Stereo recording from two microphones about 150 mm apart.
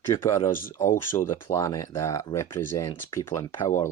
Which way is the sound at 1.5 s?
20° left (ahead or behind).